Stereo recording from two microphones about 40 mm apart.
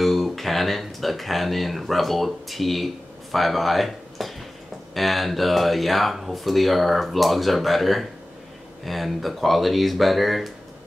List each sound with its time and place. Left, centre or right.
0.0 s speech: centre